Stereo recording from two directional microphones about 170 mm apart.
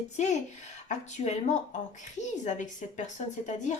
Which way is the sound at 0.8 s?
45° left (ahead or behind).